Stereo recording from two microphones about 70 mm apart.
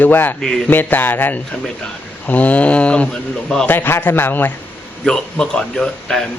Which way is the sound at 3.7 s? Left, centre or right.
Left.